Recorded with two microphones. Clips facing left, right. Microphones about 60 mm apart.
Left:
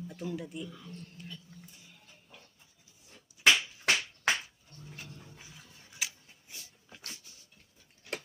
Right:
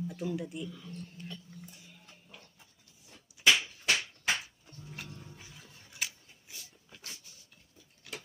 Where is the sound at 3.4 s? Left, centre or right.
Right.